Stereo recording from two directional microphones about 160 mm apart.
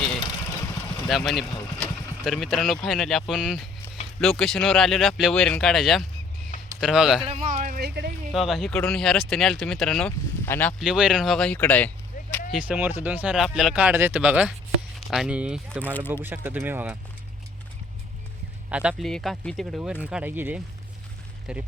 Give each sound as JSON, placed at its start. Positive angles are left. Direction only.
{"t": 1.0, "sound": "speech", "side_deg": 0}
{"t": 7.5, "sound": "speech", "side_deg": -60}
{"t": 8.3, "sound": "speech", "side_deg": 0}
{"t": 10.8, "sound": "speech", "side_deg": -5}
{"t": 12.5, "sound": "speech", "side_deg": -10}
{"t": 18.7, "sound": "speech", "side_deg": -5}